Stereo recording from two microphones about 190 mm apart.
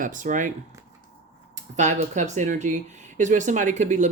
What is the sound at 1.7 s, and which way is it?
Speech, 40° right (ahead or behind).